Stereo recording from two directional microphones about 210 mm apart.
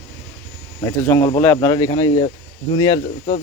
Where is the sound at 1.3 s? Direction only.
10° left (ahead or behind).